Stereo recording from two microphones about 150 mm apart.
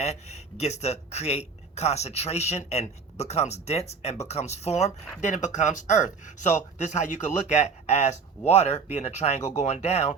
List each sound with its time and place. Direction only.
0.0 s speech: 45° left (ahead or behind)